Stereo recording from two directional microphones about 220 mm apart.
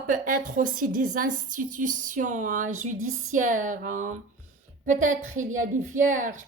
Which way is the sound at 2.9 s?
70° right (ahead or behind).